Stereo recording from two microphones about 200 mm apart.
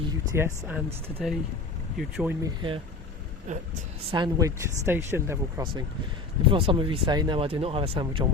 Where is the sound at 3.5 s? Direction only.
35° right (ahead or behind).